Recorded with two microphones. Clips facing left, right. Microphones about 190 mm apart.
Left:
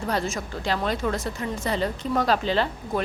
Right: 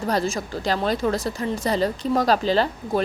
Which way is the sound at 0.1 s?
35° right (ahead or behind).